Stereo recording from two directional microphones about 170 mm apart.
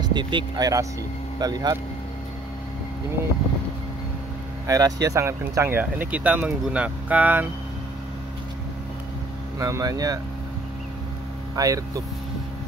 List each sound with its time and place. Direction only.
0.1 s speech: 25° right (ahead or behind)
4.6 s speech: 20° right (ahead or behind)
9.6 s speech: 20° right (ahead or behind)
11.5 s speech: 20° right (ahead or behind)